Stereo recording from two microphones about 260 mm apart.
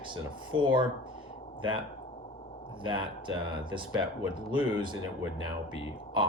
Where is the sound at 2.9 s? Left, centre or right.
Centre.